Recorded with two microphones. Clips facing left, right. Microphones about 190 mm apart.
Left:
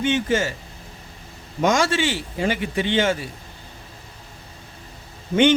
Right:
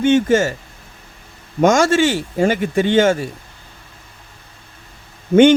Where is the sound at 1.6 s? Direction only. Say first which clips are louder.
Right 7 dB; 45° right (ahead or behind).